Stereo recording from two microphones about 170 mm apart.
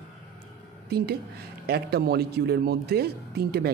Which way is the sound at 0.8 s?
70° right (ahead or behind).